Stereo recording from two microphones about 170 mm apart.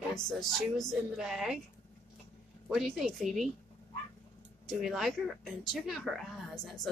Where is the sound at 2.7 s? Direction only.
Centre (ahead or behind).